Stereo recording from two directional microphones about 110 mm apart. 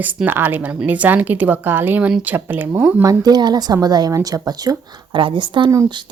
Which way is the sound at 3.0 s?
35° right (ahead or behind).